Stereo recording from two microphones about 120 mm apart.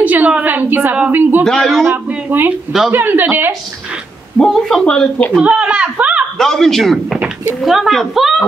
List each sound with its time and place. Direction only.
0.0 s a woman's voice: 15° right (ahead or behind)
1.4 s a man's voice: 5° left (ahead or behind)
1.9 s a sound: 15° right (ahead or behind)
2.9 s speech: 15° right (ahead or behind)
4.4 s a man's voice: 5° left (ahead or behind)
5.4 s speech: 10° right (ahead or behind)
6.3 s a man's voice: 5° left (ahead or behind)